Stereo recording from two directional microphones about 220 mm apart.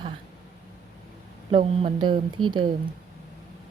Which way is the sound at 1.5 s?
25° right (ahead or behind).